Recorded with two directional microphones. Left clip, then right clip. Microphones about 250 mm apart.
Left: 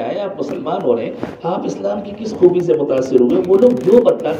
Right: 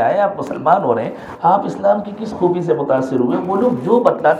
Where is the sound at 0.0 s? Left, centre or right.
Right.